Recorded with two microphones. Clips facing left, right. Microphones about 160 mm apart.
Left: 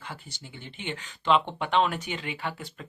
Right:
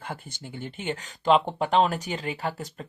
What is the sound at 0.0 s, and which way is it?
Speech, 50° right (ahead or behind).